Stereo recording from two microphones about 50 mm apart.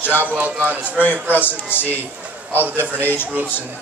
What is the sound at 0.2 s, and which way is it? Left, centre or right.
Speech, right.